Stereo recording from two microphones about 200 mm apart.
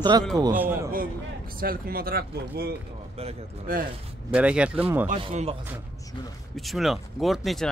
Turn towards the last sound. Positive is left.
turn(degrees=0)  # may be behind; listen again after turning